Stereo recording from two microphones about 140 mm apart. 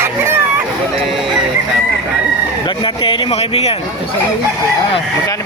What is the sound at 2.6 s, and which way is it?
A man's voice, 35° left (ahead or behind).